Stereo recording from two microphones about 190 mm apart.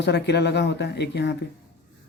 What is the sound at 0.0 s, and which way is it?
Speech, 60° left (ahead or behind).